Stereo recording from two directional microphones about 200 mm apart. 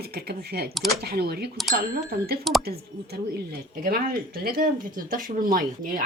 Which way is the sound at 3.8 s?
45° right (ahead or behind).